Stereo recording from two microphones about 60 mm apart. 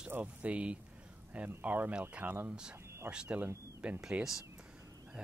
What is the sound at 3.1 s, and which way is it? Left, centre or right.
Speech, centre.